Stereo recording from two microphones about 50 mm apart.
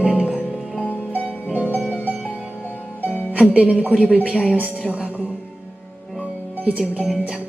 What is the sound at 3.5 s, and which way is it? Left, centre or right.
Speech, right.